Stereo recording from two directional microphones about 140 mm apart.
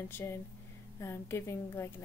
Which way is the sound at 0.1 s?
20° left (ahead or behind).